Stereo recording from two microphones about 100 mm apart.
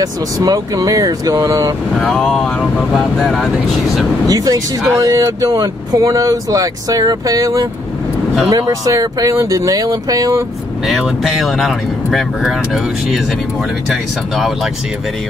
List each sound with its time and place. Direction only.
0.0 s speech: 35° right (ahead or behind)
2.0 s speech: centre (ahead or behind)
4.3 s speech: 35° right (ahead or behind)
10.9 s speech: centre (ahead or behind)
14.3 s speech: centre (ahead or behind)